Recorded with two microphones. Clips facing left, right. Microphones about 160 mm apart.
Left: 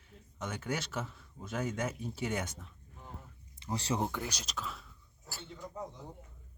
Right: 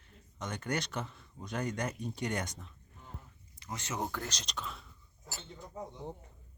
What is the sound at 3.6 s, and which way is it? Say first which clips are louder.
Speech: left 5 dB; 30° left (ahead or behind).